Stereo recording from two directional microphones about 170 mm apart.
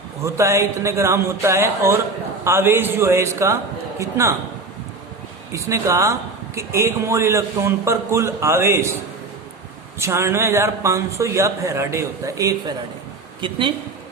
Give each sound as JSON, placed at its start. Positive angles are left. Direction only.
{"t": 0.2, "sound": "speech", "side_deg": -15}
{"t": 5.5, "sound": "speech", "side_deg": -15}
{"t": 10.0, "sound": "speech", "side_deg": -15}